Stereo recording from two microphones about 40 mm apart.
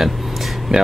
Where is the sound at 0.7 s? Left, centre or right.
Right.